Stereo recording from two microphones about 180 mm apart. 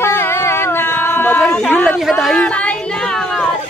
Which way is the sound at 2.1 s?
5° left (ahead or behind).